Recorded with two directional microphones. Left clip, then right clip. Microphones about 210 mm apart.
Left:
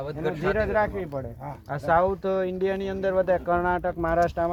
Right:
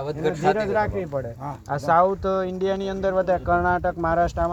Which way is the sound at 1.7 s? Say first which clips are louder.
Right 3 dB; 15° left (ahead or behind).